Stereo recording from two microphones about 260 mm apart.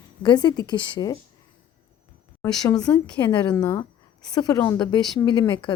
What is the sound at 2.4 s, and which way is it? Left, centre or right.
A woman's voice, centre.